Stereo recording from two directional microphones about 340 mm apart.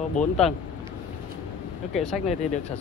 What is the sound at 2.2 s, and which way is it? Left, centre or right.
Speech, centre.